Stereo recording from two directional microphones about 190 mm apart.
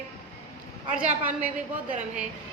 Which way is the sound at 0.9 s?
10° right (ahead or behind).